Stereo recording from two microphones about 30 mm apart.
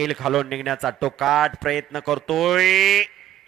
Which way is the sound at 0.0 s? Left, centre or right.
Centre.